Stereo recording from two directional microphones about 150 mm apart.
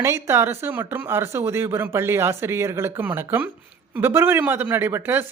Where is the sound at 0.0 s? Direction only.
15° right (ahead or behind).